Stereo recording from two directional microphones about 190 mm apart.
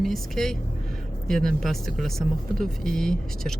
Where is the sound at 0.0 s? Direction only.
Centre (ahead or behind).